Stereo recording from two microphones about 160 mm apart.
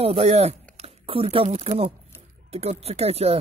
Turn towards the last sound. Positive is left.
turn(degrees=-40)  # may be behind; listen again after turning